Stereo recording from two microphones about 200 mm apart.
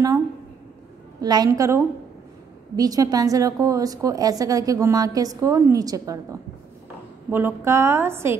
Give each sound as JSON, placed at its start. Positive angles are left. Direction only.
{"t": 1.2, "sound": "a woman's voice", "side_deg": -20}
{"t": 7.2, "sound": "a woman's voice", "side_deg": -10}